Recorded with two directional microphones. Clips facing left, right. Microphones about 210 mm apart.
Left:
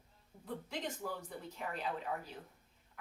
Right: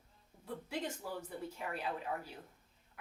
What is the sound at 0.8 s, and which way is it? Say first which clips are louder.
Speech: even; 10° right (ahead or behind).